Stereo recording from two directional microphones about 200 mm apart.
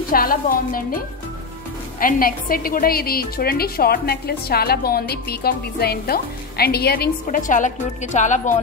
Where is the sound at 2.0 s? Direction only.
45° left (ahead or behind).